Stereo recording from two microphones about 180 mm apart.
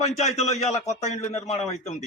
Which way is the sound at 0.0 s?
40° left (ahead or behind).